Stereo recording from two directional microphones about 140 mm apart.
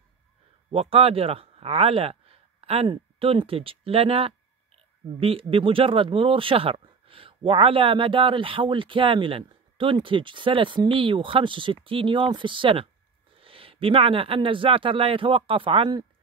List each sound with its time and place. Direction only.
0.7 s speech: 45° right (ahead or behind)